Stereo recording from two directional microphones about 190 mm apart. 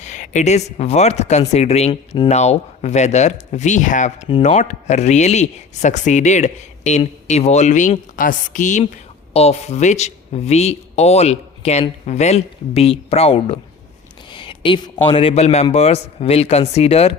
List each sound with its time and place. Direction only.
0.0 s speech: 40° left (ahead or behind)